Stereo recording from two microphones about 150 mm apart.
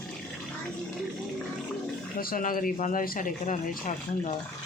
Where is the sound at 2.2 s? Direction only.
70° left (ahead or behind).